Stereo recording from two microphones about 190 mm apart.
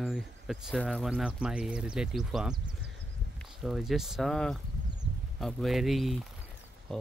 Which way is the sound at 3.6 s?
Centre (ahead or behind).